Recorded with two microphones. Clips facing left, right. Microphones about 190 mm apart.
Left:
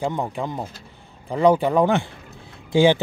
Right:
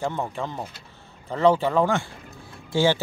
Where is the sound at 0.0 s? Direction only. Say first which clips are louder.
Left 3 dB; 15° left (ahead or behind).